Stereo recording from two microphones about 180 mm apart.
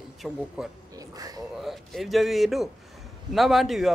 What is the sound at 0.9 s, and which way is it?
Speech, 20° right (ahead or behind).